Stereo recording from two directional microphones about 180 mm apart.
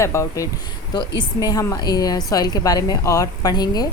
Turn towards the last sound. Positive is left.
turn(degrees=20)  # may be behind; listen again after turning